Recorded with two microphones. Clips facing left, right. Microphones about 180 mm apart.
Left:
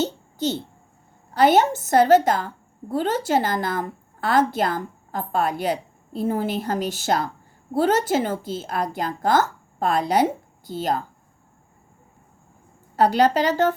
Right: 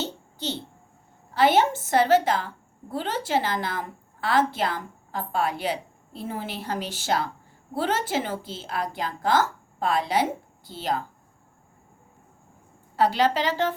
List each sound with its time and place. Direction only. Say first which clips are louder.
0.0 s a sound: left 7 dB; 45° left (ahead or behind)
1.3 s a woman's voice: left 3 dB; 45° left (ahead or behind)
13.0 s a woman's voice: left 4 dB; 45° left (ahead or behind)